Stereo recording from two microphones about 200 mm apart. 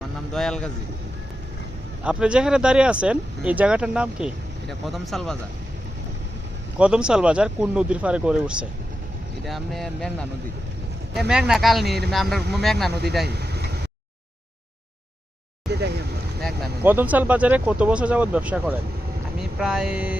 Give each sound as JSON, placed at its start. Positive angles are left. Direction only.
{"t": 0.3, "sound": "speech", "side_deg": 5}
{"t": 2.0, "sound": "speech", "side_deg": -5}
{"t": 6.7, "sound": "speech", "side_deg": -5}
{"t": 11.3, "sound": "speech", "side_deg": -5}
{"t": 13.2, "sound": "speech", "side_deg": -55}
{"t": 15.7, "sound": "vehicle", "side_deg": -55}
{"t": 16.8, "sound": "speech", "side_deg": -10}